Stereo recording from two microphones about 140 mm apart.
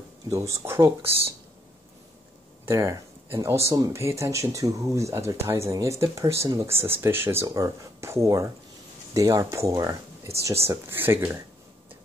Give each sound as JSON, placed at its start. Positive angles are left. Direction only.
{"t": 0.3, "sound": "speech", "side_deg": -20}
{"t": 2.6, "sound": "speech", "side_deg": -20}